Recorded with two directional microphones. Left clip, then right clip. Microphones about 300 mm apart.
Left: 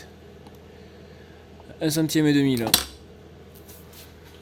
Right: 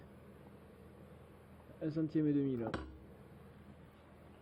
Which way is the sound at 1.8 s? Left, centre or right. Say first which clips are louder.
Left 14 dB; centre.